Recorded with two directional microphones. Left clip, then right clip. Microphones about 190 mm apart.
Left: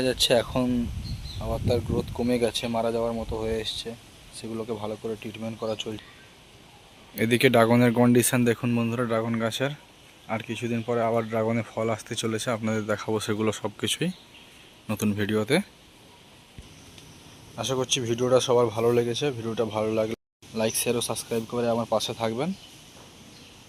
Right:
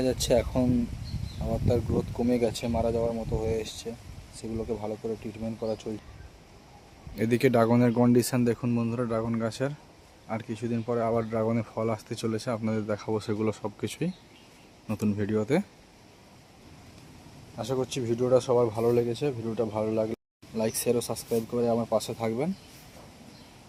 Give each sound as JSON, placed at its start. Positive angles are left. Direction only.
{"t": 0.0, "sound": "speech", "side_deg": 0}
{"t": 3.0, "sound": "speech", "side_deg": 15}
{"t": 3.4, "sound": "speech", "side_deg": 0}
{"t": 5.6, "sound": "speech", "side_deg": -5}
{"t": 7.2, "sound": "speech", "side_deg": 0}
{"t": 17.6, "sound": "speech", "side_deg": 0}
{"t": 21.9, "sound": "speech", "side_deg": -5}